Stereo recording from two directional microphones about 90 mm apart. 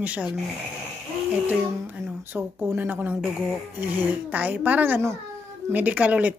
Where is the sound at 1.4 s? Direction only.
20° right (ahead or behind).